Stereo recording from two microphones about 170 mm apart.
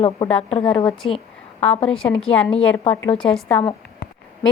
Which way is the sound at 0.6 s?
5° left (ahead or behind).